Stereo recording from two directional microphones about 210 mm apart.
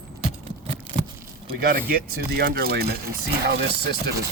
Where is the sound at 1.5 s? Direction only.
45° right (ahead or behind).